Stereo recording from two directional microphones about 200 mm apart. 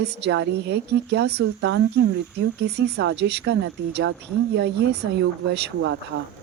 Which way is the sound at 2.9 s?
60° right (ahead or behind).